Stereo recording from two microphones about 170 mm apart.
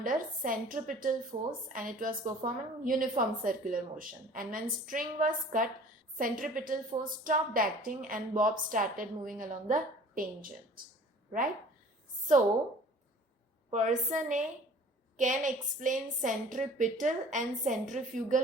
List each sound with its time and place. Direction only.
0.0 s a woman's voice: 55° right (ahead or behind)
13.7 s a woman's voice: 45° right (ahead or behind)